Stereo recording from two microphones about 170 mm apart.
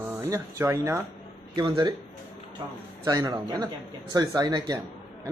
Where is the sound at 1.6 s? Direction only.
25° right (ahead or behind).